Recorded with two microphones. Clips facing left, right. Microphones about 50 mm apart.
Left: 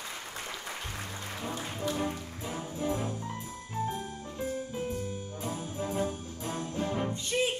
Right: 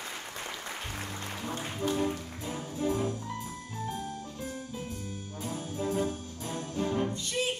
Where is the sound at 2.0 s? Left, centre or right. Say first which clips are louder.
Right 2 dB; left.